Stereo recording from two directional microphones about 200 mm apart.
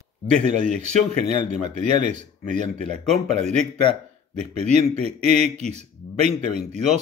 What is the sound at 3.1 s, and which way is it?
Speech, 5° left (ahead or behind).